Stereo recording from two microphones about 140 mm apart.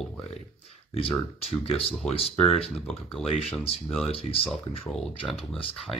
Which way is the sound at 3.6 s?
45° left (ahead or behind).